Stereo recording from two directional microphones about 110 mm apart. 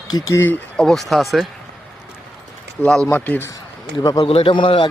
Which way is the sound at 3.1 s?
20° left (ahead or behind).